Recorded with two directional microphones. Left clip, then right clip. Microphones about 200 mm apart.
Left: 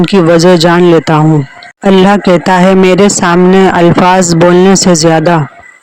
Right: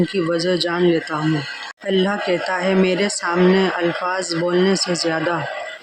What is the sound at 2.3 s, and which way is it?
Speech, 55° left (ahead or behind).